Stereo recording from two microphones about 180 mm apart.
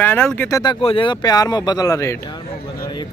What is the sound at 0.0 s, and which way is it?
Speech, 10° left (ahead or behind).